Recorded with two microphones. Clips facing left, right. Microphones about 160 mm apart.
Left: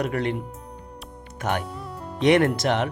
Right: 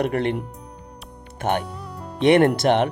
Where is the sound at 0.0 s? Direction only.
60° right (ahead or behind).